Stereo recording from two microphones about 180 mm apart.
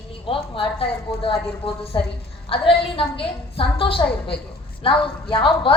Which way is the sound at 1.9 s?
25° left (ahead or behind).